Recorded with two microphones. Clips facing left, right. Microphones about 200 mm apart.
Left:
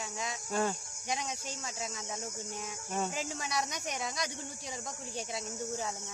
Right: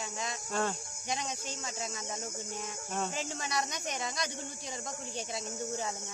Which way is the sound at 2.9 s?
5° left (ahead or behind).